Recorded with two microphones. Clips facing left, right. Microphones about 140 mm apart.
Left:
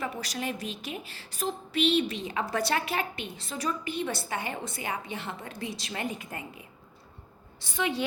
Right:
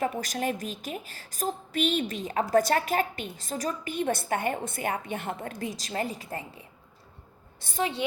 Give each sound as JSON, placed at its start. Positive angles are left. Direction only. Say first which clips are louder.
{"t": 0.0, "sound": "a woman's voice", "louder": "right 5 dB", "side_deg": -50}
{"t": 7.6, "sound": "a woman's voice", "louder": "right 2 dB", "side_deg": -45}